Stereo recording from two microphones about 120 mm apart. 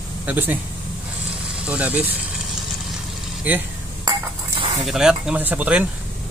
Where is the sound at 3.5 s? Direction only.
15° right (ahead or behind).